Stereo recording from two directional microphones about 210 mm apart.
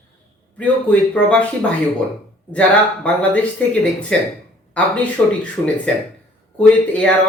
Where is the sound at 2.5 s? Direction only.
5° left (ahead or behind).